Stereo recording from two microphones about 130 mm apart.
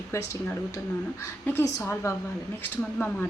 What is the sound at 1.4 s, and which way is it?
Speech, 15° left (ahead or behind).